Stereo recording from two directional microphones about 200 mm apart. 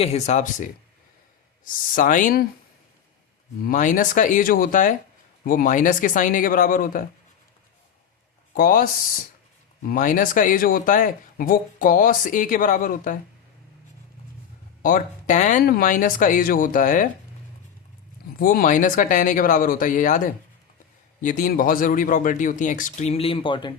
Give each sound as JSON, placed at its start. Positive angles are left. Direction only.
{"t": 0.0, "sound": "speech", "side_deg": 35}
{"t": 3.7, "sound": "a man's voice", "side_deg": 40}
{"t": 8.5, "sound": "a man's voice", "side_deg": 45}
{"t": 14.8, "sound": "speech", "side_deg": 40}
{"t": 18.3, "sound": "speech", "side_deg": 45}